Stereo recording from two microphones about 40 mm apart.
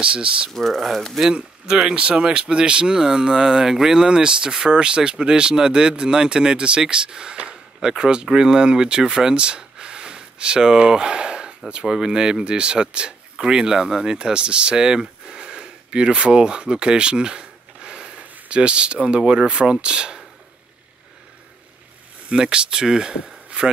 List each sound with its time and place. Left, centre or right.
0.0 s speech: right
0.5 s speech: centre
1.3 s speech: right
9.3 s a sound: right
11.7 s speech: centre
22.3 s speech: right